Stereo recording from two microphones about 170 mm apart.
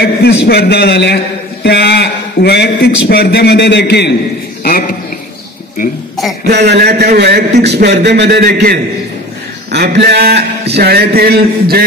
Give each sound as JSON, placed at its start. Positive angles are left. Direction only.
{"t": 0.0, "sound": "a man's voice", "side_deg": 70}
{"t": 6.4, "sound": "a man's voice", "side_deg": -75}
{"t": 9.7, "sound": "a man's voice", "side_deg": -80}